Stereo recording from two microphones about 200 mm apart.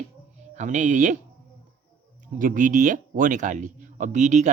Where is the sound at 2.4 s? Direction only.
40° right (ahead or behind).